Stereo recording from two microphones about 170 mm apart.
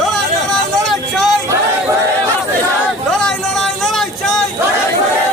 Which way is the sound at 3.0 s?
5° left (ahead or behind).